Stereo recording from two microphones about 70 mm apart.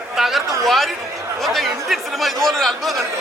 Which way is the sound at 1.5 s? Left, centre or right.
Centre.